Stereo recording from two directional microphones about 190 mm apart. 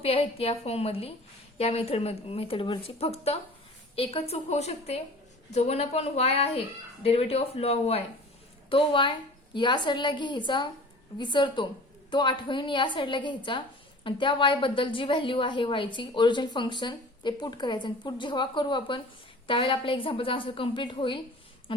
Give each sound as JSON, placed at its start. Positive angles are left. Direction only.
{"t": 0.0, "sound": "a woman's voice", "side_deg": 30}